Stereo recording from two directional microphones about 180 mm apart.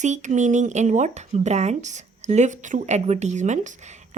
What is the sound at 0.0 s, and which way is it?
Speech, 40° right (ahead or behind).